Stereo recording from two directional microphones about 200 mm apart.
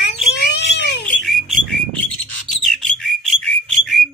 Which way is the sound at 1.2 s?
Centre (ahead or behind).